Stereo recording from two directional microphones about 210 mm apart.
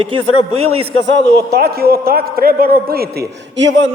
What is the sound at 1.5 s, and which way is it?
A man's voice, 50° right (ahead or behind).